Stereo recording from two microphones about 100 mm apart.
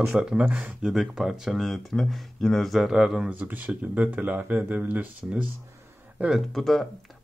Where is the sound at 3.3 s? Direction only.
15° right (ahead or behind).